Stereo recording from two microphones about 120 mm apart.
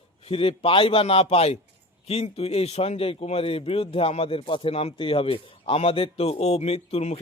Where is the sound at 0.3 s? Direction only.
50° left (ahead or behind).